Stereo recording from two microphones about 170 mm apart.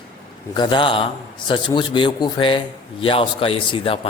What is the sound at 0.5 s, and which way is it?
A man's voice, 25° left (ahead or behind).